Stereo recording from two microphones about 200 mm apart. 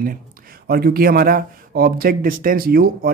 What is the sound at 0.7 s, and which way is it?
Speech, 50° right (ahead or behind).